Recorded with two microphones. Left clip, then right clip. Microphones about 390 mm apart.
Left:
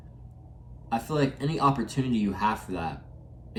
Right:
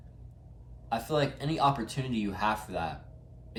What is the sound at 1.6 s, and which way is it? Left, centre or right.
Speech, centre.